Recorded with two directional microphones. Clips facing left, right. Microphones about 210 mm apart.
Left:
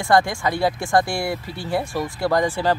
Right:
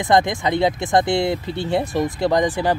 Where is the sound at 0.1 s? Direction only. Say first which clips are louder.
Right 1 dB; 20° right (ahead or behind).